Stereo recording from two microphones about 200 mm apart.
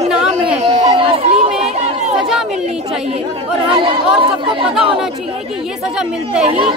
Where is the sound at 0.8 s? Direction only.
35° right (ahead or behind).